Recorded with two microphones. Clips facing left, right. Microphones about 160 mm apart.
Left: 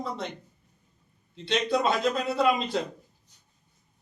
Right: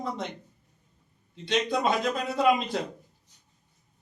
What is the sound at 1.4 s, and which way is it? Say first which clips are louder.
Speech: left 1 dB; 15° right (ahead or behind).